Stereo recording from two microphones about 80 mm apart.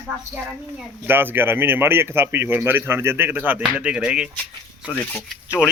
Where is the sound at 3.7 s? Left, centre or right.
Centre.